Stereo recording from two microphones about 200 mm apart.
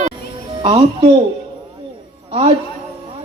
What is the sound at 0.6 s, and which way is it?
Speech, 25° right (ahead or behind).